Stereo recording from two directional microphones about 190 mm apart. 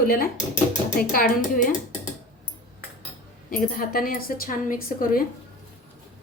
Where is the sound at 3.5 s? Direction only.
50° left (ahead or behind).